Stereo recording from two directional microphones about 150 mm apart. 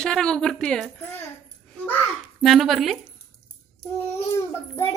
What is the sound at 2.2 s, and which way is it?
Speech, centre (ahead or behind).